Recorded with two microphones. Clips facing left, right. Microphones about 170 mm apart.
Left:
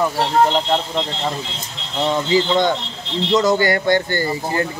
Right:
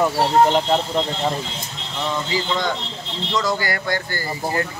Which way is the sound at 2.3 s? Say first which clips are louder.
Left 8 dB; 25° left (ahead or behind).